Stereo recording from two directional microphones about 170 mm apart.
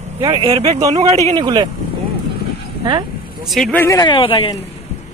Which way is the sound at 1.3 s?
25° right (ahead or behind).